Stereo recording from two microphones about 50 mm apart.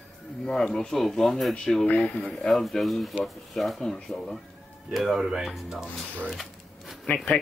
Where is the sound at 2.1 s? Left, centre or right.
Left.